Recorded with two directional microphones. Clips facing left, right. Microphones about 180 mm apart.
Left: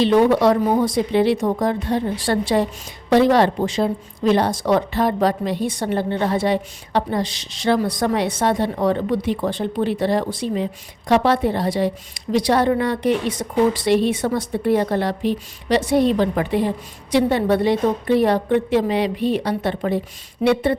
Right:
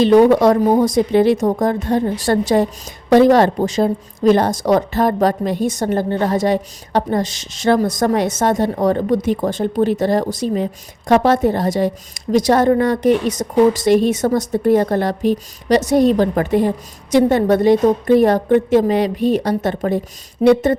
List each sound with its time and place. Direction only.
0.0 s a woman's voice: 45° right (ahead or behind)